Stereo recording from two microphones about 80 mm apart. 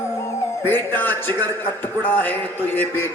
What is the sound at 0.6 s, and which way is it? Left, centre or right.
A man's voice, left.